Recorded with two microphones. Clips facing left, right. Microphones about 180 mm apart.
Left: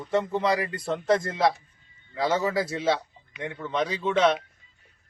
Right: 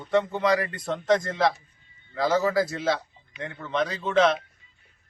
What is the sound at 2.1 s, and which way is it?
A man's voice, centre (ahead or behind).